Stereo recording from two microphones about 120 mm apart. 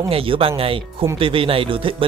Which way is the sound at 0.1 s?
50° right (ahead or behind).